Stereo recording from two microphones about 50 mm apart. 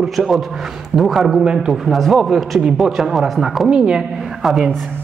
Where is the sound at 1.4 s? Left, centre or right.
Centre.